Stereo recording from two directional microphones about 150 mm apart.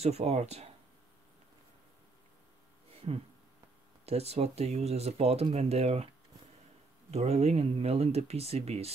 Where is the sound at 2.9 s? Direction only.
40° right (ahead or behind).